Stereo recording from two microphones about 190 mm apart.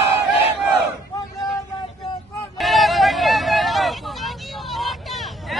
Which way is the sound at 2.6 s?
Centre (ahead or behind).